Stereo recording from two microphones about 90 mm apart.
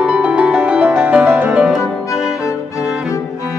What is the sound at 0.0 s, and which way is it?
Music, 10° right (ahead or behind).